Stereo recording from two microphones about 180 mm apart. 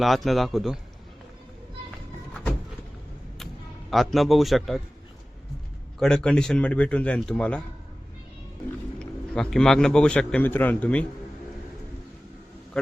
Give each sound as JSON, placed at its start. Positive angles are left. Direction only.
{"t": 0.0, "sound": "speech", "side_deg": 0}
{"t": 3.3, "sound": "a sound", "side_deg": 0}
{"t": 6.0, "sound": "speech", "side_deg": 5}
{"t": 9.0, "sound": "a man's voice", "side_deg": 5}
{"t": 12.7, "sound": "a man's voice", "side_deg": 5}